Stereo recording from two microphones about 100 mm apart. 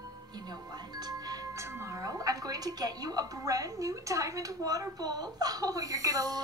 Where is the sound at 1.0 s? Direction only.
40° right (ahead or behind).